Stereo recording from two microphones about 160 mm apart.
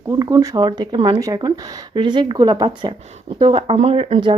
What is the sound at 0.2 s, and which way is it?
Speech, 20° right (ahead or behind).